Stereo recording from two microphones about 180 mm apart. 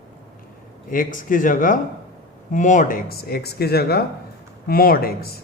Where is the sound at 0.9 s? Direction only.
50° left (ahead or behind).